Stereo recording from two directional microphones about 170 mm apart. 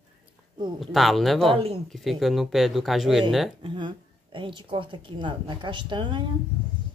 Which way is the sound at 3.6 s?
30° right (ahead or behind).